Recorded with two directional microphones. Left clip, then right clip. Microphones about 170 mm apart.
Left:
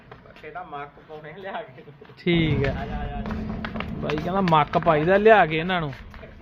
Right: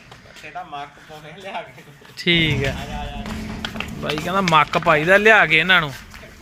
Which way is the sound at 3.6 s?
10° left (ahead or behind).